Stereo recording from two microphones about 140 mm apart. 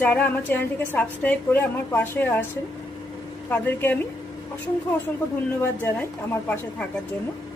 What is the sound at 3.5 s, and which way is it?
Speech, 10° left (ahead or behind).